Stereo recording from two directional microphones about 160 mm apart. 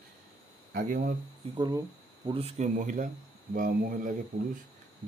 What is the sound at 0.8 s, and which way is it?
Speech, 55° right (ahead or behind).